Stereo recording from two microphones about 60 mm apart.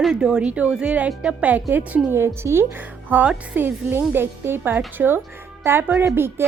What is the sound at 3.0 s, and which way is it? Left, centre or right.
A woman's voice, right.